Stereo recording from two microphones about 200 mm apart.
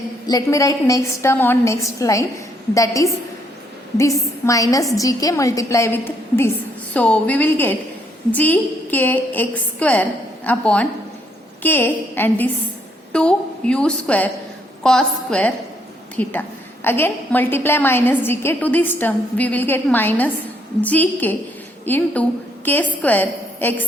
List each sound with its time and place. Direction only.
0.3 s a woman's voice: 15° left (ahead or behind)